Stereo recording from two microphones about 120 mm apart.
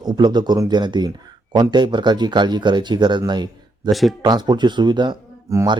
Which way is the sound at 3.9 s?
Centre (ahead or behind).